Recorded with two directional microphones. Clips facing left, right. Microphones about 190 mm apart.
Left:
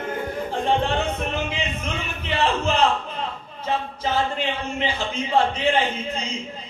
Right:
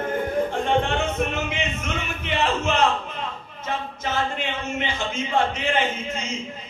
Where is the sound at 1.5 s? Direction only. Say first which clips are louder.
Even; 35° left (ahead or behind).